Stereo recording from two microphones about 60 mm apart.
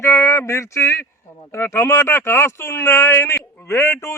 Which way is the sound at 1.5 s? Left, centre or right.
Left.